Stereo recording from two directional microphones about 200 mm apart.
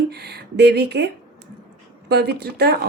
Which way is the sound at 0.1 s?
55° right (ahead or behind).